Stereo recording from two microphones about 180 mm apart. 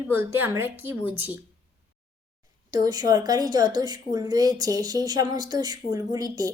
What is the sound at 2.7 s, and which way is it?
A woman's voice, 20° right (ahead or behind).